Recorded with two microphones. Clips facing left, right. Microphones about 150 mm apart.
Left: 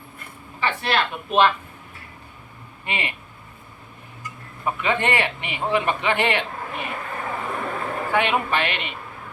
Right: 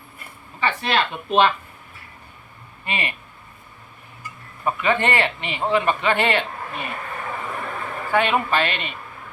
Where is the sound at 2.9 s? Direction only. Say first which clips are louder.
Right 1 dB; 20° left (ahead or behind).